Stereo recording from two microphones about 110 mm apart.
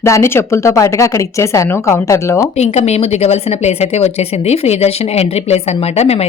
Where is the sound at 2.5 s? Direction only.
75° left (ahead or behind).